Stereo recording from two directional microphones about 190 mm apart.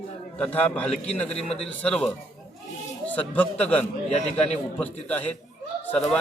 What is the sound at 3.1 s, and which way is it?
Speech, 10° left (ahead or behind).